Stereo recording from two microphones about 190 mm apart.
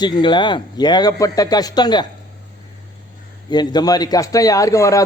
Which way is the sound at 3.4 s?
20° left (ahead or behind).